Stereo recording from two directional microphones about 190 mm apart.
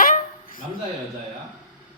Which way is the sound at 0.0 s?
45° left (ahead or behind).